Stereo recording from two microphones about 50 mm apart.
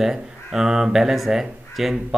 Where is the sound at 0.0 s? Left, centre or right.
Centre.